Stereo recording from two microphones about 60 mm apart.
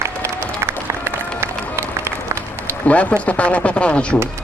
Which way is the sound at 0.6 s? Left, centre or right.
Right.